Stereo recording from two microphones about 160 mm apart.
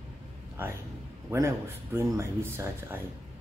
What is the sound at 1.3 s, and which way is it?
Speech, 15° right (ahead or behind).